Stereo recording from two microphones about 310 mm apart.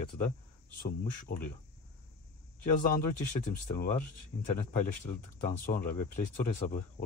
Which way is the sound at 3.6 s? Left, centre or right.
Left.